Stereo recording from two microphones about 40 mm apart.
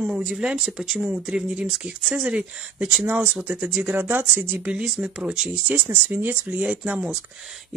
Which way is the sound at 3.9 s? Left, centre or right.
Right.